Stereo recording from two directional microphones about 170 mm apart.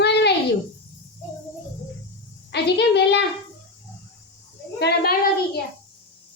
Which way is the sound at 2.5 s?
80° left.